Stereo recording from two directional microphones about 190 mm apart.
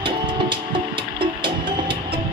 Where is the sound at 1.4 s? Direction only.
25° right (ahead or behind).